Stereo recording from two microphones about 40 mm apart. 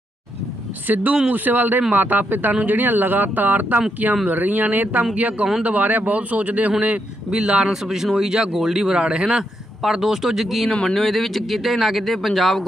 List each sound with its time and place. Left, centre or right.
0.8 s speech: right
5.1 s speech: right
7.2 s speech: right
7.7 s a man's voice: centre